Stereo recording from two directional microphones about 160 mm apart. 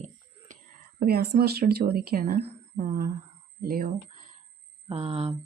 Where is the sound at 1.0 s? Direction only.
75° right (ahead or behind); by 4.3 s 55° right (ahead or behind).